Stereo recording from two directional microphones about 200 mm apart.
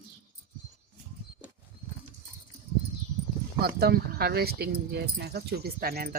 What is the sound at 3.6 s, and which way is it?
Speech, 50° right (ahead or behind).